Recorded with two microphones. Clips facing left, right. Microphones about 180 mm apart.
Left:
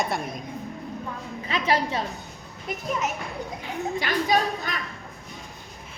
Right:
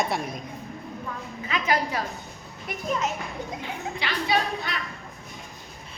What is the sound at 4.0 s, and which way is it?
Speech, 45° left (ahead or behind).